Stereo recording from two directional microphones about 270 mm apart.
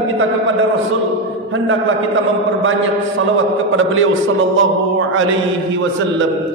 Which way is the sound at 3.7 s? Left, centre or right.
Right.